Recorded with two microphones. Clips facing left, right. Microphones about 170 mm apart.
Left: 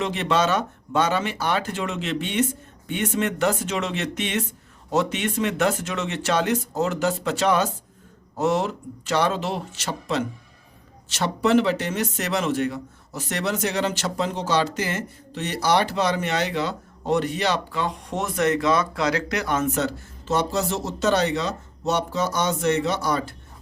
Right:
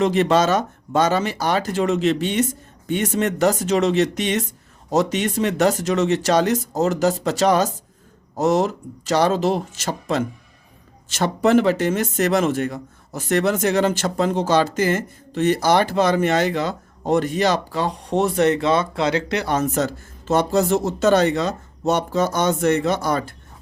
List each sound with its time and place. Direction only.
0.0 s speech: 45° right (ahead or behind)